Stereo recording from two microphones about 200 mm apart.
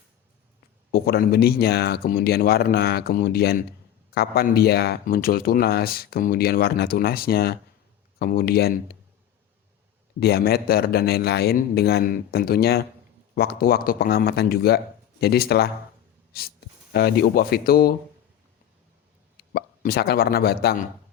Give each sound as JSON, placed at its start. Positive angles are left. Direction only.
{"t": 0.9, "sound": "speech", "side_deg": 50}
{"t": 10.2, "sound": "speech", "side_deg": 50}
{"t": 19.5, "sound": "speech", "side_deg": 50}